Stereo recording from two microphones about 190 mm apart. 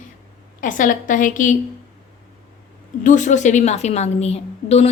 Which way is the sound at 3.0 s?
40° left (ahead or behind).